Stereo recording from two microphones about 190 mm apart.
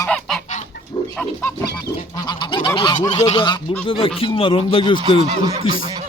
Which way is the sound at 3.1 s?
35° left (ahead or behind).